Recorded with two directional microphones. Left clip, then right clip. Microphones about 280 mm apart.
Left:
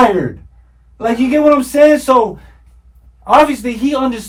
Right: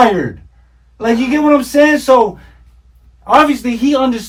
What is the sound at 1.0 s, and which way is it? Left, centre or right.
Speech, centre.